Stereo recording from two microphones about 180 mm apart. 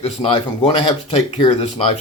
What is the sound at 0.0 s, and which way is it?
Speech, 30° left (ahead or behind).